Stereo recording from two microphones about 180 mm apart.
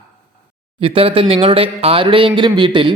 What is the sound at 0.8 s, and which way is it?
Speech, 30° right (ahead or behind).